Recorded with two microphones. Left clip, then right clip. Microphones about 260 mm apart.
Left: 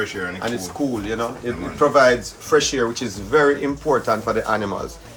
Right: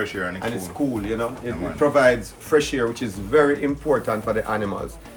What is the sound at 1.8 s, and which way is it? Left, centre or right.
A man's voice, centre.